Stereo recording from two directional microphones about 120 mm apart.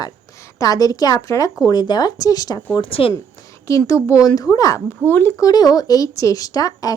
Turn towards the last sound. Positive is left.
turn(degrees=30)  # may be behind; listen again after turning